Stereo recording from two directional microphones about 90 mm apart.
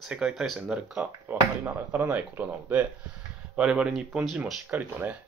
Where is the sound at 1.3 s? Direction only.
20° right (ahead or behind); by 4.5 s 5° right (ahead or behind).